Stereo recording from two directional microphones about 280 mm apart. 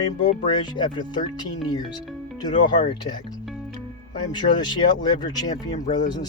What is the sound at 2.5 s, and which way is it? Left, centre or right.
Speech, left.